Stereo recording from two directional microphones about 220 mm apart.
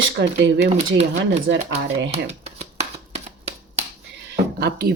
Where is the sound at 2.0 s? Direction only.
30° right (ahead or behind).